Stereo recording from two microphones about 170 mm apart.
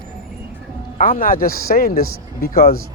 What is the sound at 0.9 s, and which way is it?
A man's voice, 55° left (ahead or behind).